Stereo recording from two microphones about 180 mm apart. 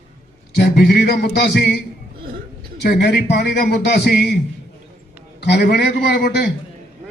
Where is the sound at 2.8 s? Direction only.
65° left (ahead or behind).